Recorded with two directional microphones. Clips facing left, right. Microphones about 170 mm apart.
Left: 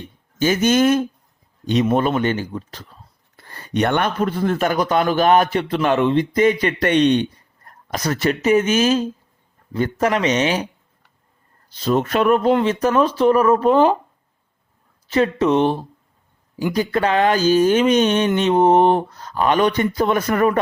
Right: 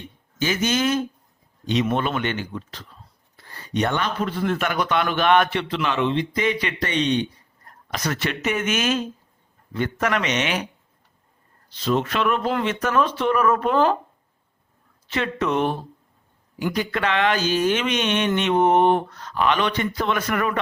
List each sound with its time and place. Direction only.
0.3 s a man's voice: 45° left (ahead or behind)
3.3 s a man's voice: 55° left (ahead or behind)
7.9 s speech: 40° left (ahead or behind)
11.7 s a man's voice: 40° left (ahead or behind)
12.5 s speech: 30° left (ahead or behind)
15.1 s speech: 35° left (ahead or behind)